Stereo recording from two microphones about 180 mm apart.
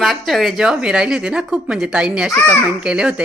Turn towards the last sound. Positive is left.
turn(degrees=-5)  # may be behind; listen again after turning